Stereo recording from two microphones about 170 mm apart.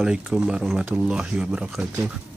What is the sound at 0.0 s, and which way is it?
Speech, 5° right (ahead or behind).